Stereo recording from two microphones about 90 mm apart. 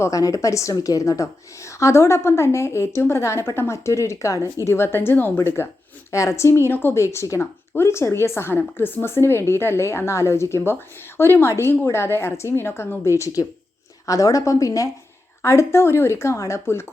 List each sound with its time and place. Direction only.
0.0 s a woman's voice: 40° left (ahead or behind)